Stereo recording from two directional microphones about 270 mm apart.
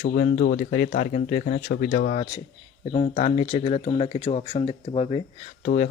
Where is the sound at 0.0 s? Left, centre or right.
Left.